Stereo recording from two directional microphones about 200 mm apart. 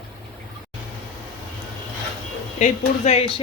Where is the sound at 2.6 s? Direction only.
35° left (ahead or behind).